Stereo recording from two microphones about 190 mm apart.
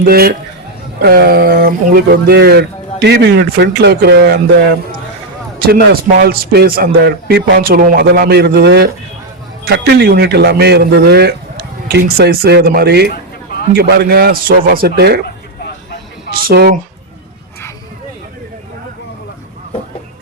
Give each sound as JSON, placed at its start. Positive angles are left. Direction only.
{"t": 0.0, "sound": "speech", "side_deg": -55}
{"t": 16.3, "sound": "speech", "side_deg": -50}